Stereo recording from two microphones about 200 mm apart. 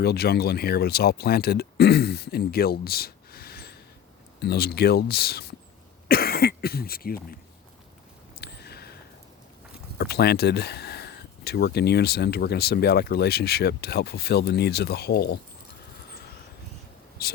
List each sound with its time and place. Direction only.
0.0 s speech: 55° left (ahead or behind)
8.4 s a sound: 55° left (ahead or behind)
10.0 s speech: 55° left (ahead or behind)
17.2 s speech: 50° left (ahead or behind)